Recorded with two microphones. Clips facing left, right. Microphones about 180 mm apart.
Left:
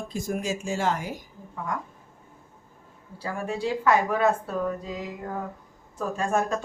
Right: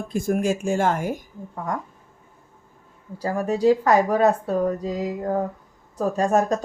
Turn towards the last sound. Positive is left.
turn(degrees=-40)  # may be behind; listen again after turning